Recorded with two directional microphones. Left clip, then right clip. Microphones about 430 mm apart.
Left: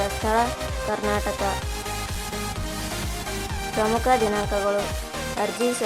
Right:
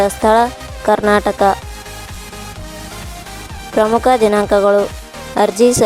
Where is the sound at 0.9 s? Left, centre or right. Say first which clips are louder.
Right 14 dB; centre.